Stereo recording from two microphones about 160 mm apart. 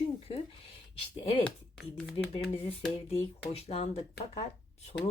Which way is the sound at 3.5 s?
40° left (ahead or behind).